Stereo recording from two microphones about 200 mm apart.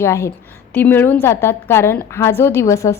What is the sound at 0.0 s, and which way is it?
A woman's voice, 15° left (ahead or behind).